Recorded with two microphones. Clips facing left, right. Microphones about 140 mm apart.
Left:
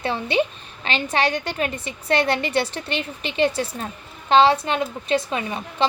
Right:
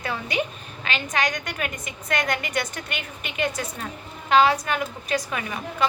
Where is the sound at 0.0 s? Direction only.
30° left (ahead or behind).